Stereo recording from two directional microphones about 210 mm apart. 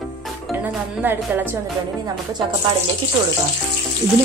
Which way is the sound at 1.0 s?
10° right (ahead or behind).